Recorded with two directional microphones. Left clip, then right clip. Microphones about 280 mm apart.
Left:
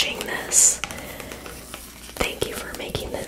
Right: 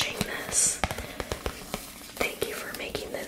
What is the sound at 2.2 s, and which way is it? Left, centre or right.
Whispering, left.